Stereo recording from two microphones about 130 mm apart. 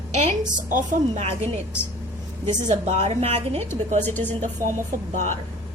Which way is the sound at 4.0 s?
15° left (ahead or behind).